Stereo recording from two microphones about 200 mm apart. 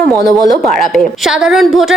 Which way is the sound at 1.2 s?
Centre (ahead or behind).